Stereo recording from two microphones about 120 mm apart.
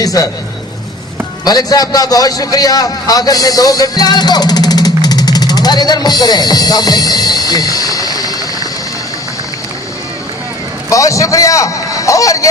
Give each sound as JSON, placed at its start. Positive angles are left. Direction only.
{"t": 0.0, "sound": "a man's voice", "side_deg": 30}
{"t": 1.5, "sound": "a man's voice", "side_deg": 30}
{"t": 10.8, "sound": "a man's voice", "side_deg": 25}